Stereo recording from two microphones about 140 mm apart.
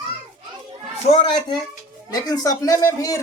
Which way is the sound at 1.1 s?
40° left (ahead or behind).